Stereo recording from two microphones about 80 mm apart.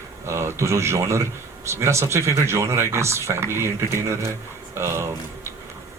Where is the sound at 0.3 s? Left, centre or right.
Right.